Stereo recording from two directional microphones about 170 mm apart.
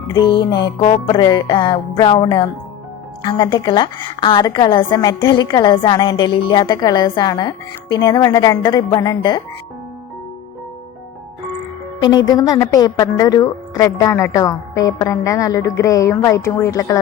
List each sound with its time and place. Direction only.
0.6 s speech: 35° left (ahead or behind)
1.0 s a woman's voice: 25° left (ahead or behind)
12.0 s a woman's voice: 25° left (ahead or behind)